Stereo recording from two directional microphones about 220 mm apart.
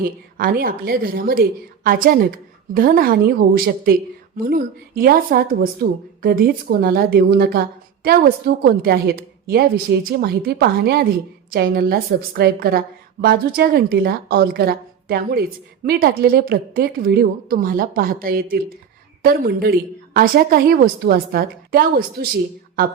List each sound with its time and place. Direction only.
0.0 s a woman's voice: 40° right (ahead or behind)